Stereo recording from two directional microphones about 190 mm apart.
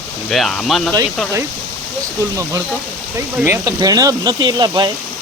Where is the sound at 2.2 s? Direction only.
15° right (ahead or behind).